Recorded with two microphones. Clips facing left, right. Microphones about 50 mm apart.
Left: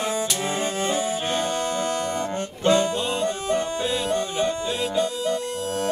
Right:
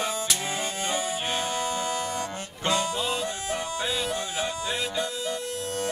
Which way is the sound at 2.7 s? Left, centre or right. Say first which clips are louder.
Left 5 dB; centre.